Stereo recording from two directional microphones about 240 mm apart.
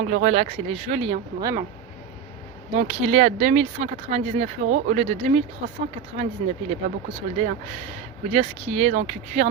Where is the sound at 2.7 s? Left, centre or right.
Right.